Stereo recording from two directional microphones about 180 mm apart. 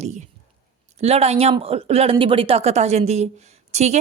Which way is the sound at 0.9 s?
35° right (ahead or behind).